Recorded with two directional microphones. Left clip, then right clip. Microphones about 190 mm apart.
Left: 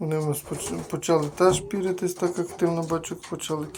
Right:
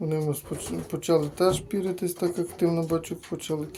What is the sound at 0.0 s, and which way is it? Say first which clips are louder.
Speech: left 1 dB; 20° right (ahead or behind).